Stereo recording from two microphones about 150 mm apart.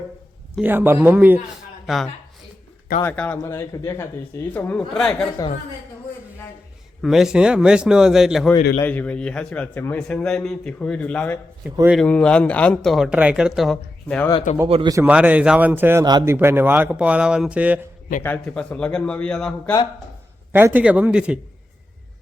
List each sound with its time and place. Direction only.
0.5 s speech: 10° right (ahead or behind)
1.9 s speech: centre (ahead or behind)
3.0 s a man's voice: 10° left (ahead or behind)
7.0 s speech: centre (ahead or behind)
8.8 s a man's voice: 10° left (ahead or behind)
14.5 s speech: 55° left (ahead or behind)
15.0 s speech: 10° right (ahead or behind)
18.2 s a man's voice: 10° left (ahead or behind)
20.5 s speech: 15° right (ahead or behind)